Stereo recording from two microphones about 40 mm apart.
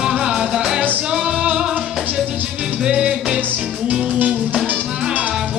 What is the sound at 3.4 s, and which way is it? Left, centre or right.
Music, right.